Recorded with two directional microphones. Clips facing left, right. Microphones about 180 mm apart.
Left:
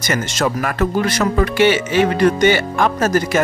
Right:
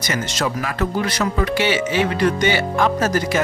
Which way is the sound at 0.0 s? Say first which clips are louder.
Left 3 dB; 50° left (ahead or behind).